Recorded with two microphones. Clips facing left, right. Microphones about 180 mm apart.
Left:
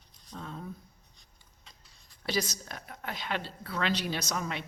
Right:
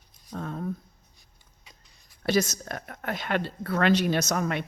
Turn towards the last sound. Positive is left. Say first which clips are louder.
# right 8 dB
turn(degrees=-55)  # may be behind; listen again after turning